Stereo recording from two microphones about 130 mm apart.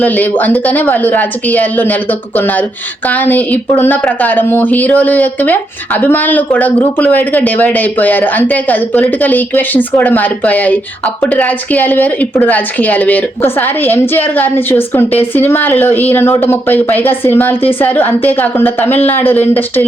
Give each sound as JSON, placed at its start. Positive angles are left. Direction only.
{"t": 0.0, "sound": "a woman's voice", "side_deg": 15}